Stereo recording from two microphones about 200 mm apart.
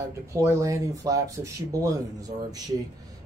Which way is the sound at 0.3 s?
15° right (ahead or behind).